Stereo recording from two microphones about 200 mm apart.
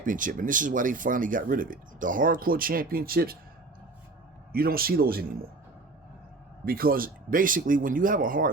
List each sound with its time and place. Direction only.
0.0 s speech: 40° right (ahead or behind)
4.5 s speech: 50° right (ahead or behind)
6.7 s speech: 45° right (ahead or behind)